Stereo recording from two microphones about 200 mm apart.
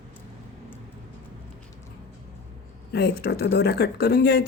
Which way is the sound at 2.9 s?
55° left (ahead or behind).